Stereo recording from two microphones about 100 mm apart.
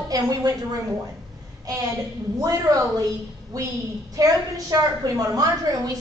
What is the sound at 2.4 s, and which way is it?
A woman's voice, 35° right (ahead or behind).